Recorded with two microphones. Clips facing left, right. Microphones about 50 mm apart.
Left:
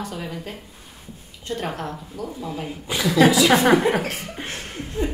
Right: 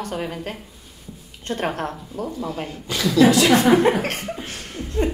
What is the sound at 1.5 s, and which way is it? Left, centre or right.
A woman's voice, right.